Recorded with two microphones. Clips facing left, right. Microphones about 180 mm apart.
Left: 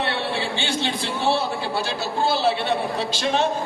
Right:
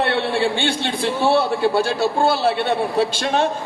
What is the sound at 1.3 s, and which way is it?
A man's voice, 60° right (ahead or behind).